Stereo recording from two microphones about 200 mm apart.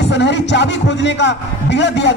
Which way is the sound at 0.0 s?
60° left (ahead or behind).